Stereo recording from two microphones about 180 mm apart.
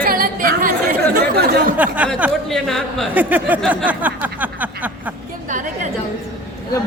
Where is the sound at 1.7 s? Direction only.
10° right (ahead or behind).